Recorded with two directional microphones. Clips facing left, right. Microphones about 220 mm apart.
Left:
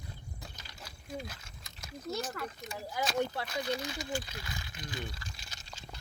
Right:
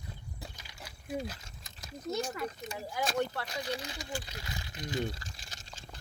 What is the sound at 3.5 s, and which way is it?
Speech, 30° right (ahead or behind).